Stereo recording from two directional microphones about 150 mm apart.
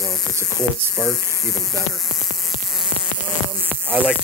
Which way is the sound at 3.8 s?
10° right (ahead or behind).